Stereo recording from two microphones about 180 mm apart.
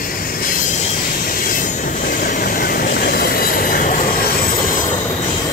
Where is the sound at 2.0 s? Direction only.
50° left (ahead or behind).